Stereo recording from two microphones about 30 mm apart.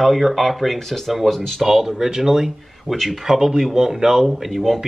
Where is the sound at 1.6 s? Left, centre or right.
Centre.